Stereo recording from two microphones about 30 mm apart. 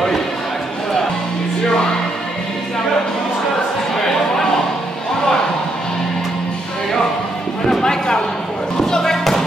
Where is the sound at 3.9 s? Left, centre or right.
Centre.